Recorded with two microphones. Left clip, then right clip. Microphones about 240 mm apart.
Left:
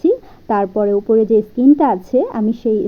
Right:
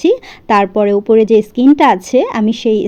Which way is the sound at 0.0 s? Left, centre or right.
Right.